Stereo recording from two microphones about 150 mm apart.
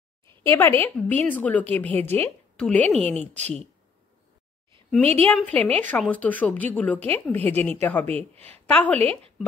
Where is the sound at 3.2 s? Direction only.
40° right (ahead or behind).